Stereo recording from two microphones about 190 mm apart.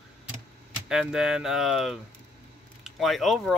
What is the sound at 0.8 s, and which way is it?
Speech, 5° right (ahead or behind).